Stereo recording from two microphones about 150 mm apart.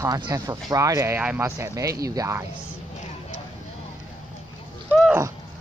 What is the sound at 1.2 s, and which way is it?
Speech, 10° right (ahead or behind).